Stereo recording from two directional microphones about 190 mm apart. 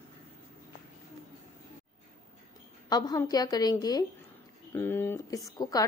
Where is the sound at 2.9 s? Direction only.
20° left (ahead or behind).